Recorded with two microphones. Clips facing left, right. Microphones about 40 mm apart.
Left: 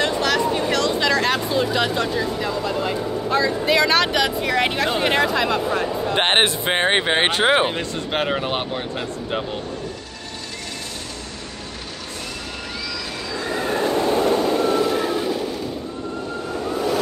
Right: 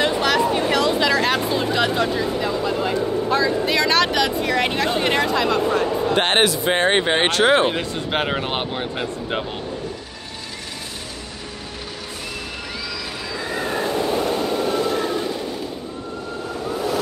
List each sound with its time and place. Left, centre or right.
0.0 s a sound: centre
2.1 s speech: centre
6.1 s speech: left
6.7 s speech: centre
7.7 s speech: centre
14.3 s vehicle: centre